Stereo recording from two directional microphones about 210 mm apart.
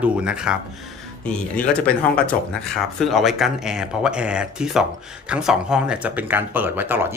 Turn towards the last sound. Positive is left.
turn(degrees=-10)  # may be behind; listen again after turning